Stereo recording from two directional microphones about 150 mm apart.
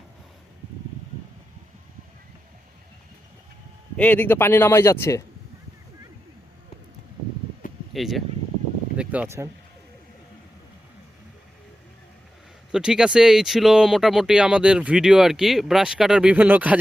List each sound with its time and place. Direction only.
3.9 s a man's voice: 10° left (ahead or behind)
7.9 s speech: centre (ahead or behind)
12.7 s speech: 5° right (ahead or behind)